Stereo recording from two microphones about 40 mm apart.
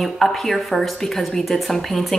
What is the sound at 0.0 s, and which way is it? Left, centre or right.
A woman's voice, centre.